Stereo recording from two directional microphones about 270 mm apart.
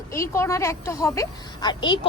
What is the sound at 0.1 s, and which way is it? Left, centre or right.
A woman's voice, centre.